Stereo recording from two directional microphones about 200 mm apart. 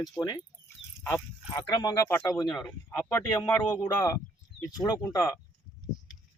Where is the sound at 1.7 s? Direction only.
20° left (ahead or behind).